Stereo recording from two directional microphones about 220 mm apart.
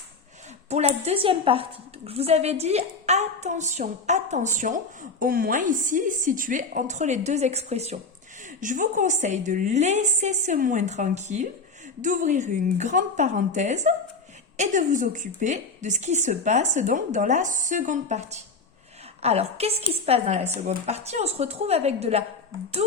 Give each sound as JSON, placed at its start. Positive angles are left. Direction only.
{"t": 0.7, "sound": "a woman's voice", "side_deg": -30}